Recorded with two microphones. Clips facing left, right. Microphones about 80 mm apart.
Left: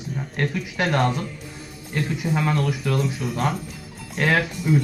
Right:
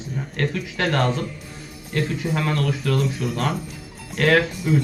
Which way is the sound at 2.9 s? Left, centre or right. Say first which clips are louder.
Right 1 dB; centre.